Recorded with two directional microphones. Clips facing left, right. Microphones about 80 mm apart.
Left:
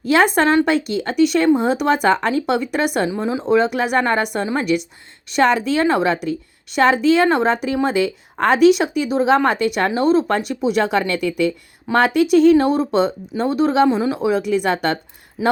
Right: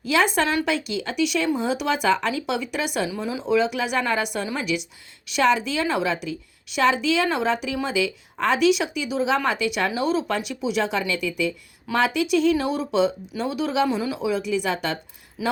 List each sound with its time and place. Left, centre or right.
0.0 s a woman's voice: left
3.1 s a woman's voice: left
14.2 s a woman's voice: left
15.4 s speech: left